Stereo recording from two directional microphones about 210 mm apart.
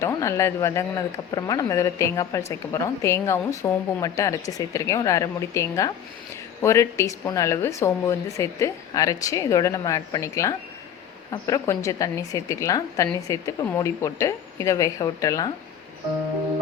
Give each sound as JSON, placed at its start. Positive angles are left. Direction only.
{"t": 0.0, "sound": "a woman's voice", "side_deg": 15}